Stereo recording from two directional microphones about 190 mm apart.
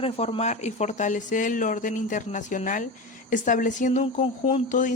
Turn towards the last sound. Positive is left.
turn(degrees=35)  # may be behind; listen again after turning